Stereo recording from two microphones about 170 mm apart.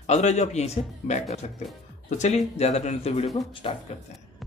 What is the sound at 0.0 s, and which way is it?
A man's voice, 40° left (ahead or behind).